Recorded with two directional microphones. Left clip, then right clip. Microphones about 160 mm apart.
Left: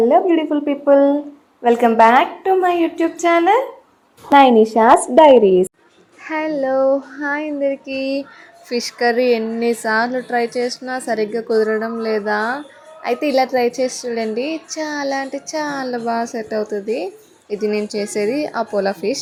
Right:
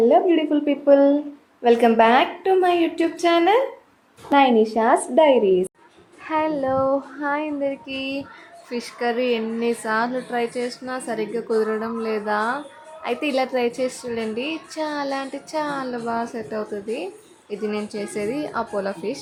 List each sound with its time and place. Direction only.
0.0 s a woman's voice: 5° left (ahead or behind)
4.3 s speech: 30° left (ahead or behind)
6.2 s a woman's voice: 10° left (ahead or behind)
6.6 s female singing: 10° left (ahead or behind)
8.7 s speech: 30° left (ahead or behind)